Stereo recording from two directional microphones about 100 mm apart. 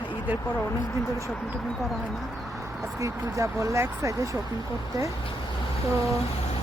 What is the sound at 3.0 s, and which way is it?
Speech, 30° right (ahead or behind).